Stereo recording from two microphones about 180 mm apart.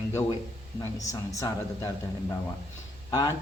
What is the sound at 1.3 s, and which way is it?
Speech, 20° left (ahead or behind).